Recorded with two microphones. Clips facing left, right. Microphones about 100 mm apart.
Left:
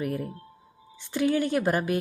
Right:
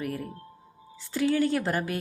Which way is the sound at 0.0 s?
25° left (ahead or behind).